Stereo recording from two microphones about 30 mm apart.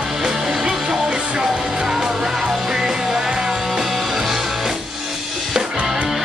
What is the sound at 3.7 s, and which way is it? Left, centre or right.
Music, centre.